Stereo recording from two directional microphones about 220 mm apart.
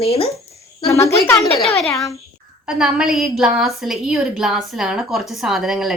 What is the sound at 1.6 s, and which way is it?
A woman's voice, centre (ahead or behind).